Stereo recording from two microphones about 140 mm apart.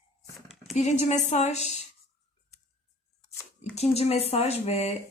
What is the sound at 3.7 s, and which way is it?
A woman's voice, 50° left (ahead or behind).